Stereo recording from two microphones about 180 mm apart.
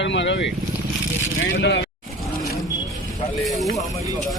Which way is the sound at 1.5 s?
75° left (ahead or behind).